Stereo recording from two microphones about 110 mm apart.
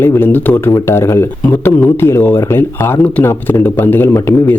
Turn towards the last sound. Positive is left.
turn(degrees=20)  # may be behind; listen again after turning